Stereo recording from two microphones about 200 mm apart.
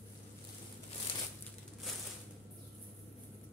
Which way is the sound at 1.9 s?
Centre (ahead or behind).